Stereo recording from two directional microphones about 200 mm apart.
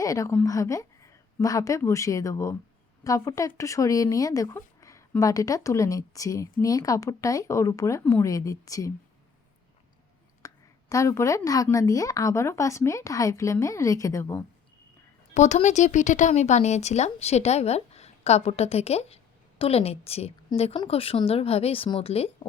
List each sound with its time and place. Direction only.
0.0 s speech: 15° left (ahead or behind)
10.4 s speech: 15° left (ahead or behind)
15.4 s speech: 35° left (ahead or behind)